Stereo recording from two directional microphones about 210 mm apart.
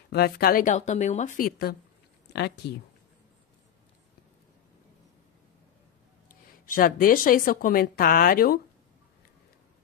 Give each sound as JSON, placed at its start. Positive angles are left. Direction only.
{"t": 0.1, "sound": "speech", "side_deg": 45}
{"t": 6.6, "sound": "a woman's voice", "side_deg": 40}